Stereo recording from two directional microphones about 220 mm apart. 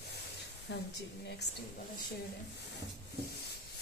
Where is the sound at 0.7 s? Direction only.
50° left (ahead or behind).